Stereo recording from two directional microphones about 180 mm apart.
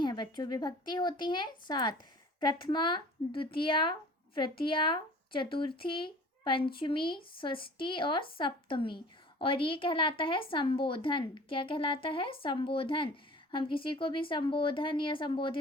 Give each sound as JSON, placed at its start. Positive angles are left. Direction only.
{"t": 0.0, "sound": "a woman's voice", "side_deg": 25}